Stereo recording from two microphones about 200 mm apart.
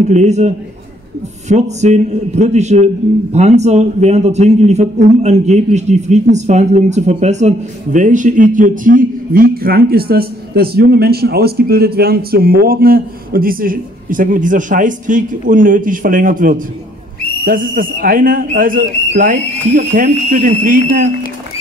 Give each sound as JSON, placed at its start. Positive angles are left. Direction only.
{"t": 0.1, "sound": "a man's voice", "side_deg": -35}